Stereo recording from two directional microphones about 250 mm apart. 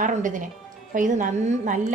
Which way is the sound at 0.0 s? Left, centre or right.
Right.